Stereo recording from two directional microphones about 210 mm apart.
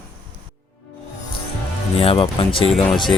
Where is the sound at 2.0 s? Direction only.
25° left (ahead or behind).